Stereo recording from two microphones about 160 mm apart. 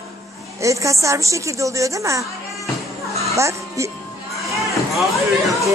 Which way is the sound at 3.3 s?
20° right (ahead or behind).